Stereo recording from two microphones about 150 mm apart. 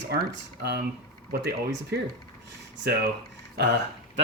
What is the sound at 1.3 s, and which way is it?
Speech, 90° right.